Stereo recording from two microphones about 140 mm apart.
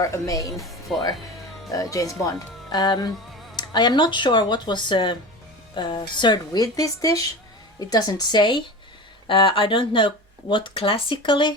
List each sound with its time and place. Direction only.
0.0 s a woman's voice: 25° left (ahead or behind)
0.5 s speech: centre (ahead or behind)
1.7 s a woman's voice: 25° left (ahead or behind)